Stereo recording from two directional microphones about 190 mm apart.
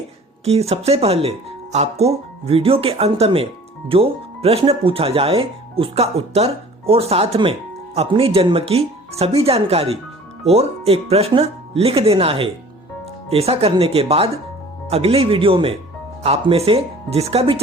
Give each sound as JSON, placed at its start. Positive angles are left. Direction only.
{"t": 0.4, "sound": "speech", "side_deg": -35}